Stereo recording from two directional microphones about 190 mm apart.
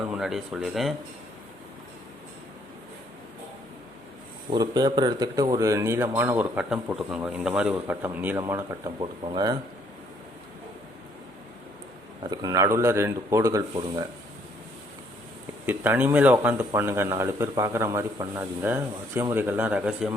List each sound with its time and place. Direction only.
0.1 s speech: centre (ahead or behind)
4.4 s speech: 20° right (ahead or behind)
12.3 s speech: 20° right (ahead or behind)
15.6 s speech: 10° right (ahead or behind)